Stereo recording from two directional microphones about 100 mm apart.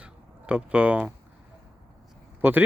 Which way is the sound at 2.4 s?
20° right (ahead or behind).